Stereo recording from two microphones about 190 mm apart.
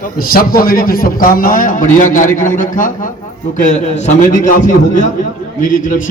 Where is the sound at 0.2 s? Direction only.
50° left (ahead or behind).